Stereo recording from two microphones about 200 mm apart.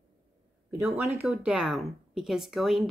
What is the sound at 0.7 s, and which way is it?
Speech, 10° right (ahead or behind).